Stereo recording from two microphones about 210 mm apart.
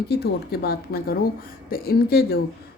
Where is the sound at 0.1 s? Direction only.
50° left (ahead or behind).